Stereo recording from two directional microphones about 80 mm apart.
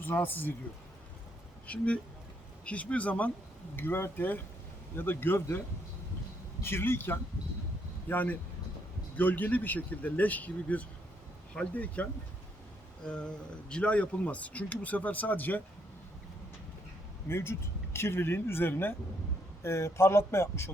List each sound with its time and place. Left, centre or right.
0.0 s speech: left
1.6 s speech: centre
13.1 s speech: centre
17.2 s speech: left